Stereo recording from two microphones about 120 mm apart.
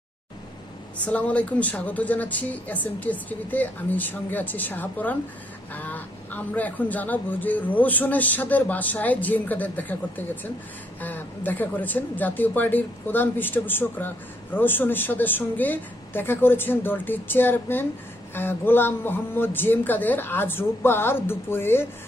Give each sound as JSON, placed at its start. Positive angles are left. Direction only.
{"t": 1.0, "sound": "speech", "side_deg": 10}